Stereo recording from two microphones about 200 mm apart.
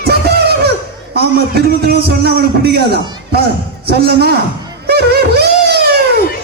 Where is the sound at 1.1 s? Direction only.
55° right (ahead or behind).